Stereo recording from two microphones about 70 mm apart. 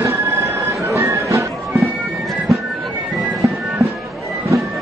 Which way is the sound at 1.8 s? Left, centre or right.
Centre.